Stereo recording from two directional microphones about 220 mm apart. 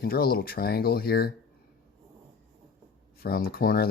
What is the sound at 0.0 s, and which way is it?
Speech, 45° left (ahead or behind).